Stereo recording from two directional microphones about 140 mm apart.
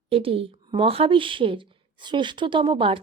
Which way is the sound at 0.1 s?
40° right (ahead or behind).